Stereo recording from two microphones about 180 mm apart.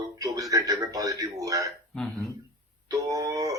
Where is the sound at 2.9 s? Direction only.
20° right (ahead or behind).